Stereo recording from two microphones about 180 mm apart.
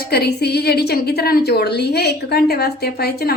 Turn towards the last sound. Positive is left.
turn(degrees=60)  # may be behind; listen again after turning